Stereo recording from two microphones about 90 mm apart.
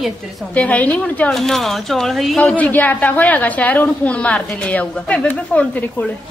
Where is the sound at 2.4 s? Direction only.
15° left (ahead or behind).